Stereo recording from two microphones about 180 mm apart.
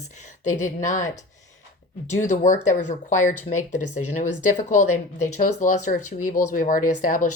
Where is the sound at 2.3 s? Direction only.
45° left (ahead or behind).